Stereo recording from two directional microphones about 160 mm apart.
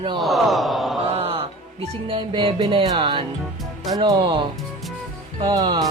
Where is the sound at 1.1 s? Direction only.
40° right (ahead or behind).